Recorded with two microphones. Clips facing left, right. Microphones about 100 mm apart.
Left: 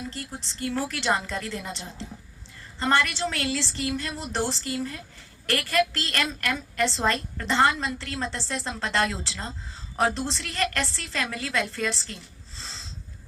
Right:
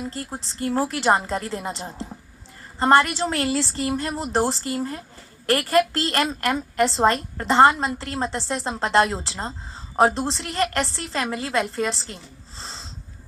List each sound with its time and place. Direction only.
0.0 s a woman's voice: 35° right (ahead or behind)